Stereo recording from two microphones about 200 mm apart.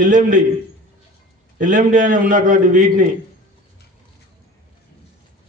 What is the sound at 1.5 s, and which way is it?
A man's voice, 40° right (ahead or behind).